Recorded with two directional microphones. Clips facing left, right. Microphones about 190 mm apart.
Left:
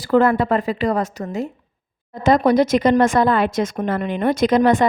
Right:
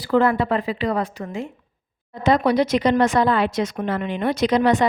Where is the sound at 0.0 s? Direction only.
50° left (ahead or behind).